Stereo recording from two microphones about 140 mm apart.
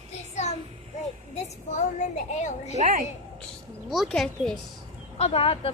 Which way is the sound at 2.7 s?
60° right (ahead or behind).